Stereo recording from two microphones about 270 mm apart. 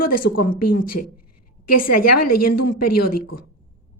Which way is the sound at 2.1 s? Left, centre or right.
Left.